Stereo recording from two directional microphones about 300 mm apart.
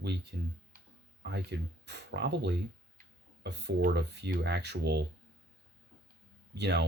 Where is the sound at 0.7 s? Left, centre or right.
Right.